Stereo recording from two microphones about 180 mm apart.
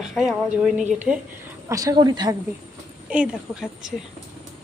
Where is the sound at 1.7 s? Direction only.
20° right (ahead or behind).